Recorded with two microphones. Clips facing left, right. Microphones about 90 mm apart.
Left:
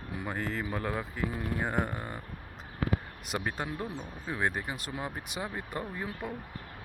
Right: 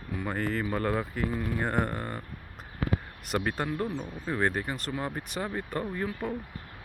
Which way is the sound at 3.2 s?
Centre (ahead or behind).